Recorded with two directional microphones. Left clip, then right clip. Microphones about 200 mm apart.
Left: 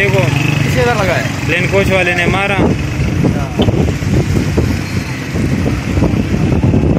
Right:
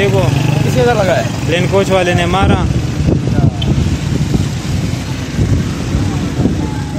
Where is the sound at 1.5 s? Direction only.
10° right (ahead or behind).